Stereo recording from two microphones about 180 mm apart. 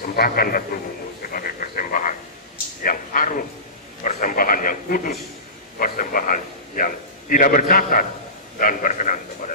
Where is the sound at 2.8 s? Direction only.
50° left (ahead or behind).